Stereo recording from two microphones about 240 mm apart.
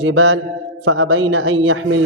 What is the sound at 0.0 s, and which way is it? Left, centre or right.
A man's voice, right.